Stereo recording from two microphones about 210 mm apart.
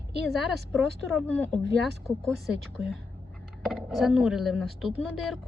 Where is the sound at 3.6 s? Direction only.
Centre (ahead or behind).